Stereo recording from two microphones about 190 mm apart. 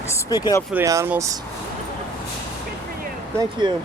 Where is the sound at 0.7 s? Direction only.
15° right (ahead or behind).